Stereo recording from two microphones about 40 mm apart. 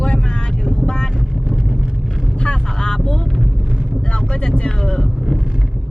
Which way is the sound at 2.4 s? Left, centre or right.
Left.